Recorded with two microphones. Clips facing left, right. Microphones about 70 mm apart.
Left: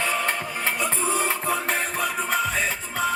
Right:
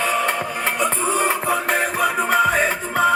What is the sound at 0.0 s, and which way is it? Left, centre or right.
Music, right.